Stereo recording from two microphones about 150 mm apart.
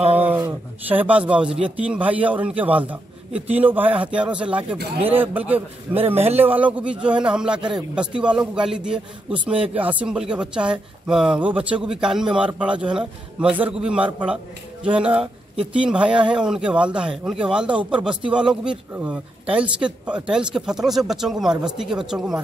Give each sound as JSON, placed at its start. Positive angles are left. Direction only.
{"t": 0.8, "sound": "a man's voice", "side_deg": -10}
{"t": 6.1, "sound": "a man's voice", "side_deg": -45}
{"t": 6.4, "sound": "a man's voice", "side_deg": -10}